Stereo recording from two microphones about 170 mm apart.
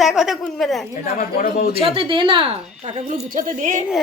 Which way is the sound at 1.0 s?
55° left (ahead or behind).